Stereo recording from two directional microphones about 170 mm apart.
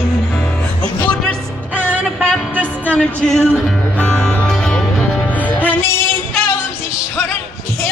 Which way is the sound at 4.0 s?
5° left (ahead or behind).